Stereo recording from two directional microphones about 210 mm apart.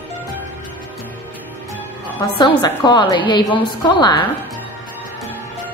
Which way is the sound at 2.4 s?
20° left (ahead or behind).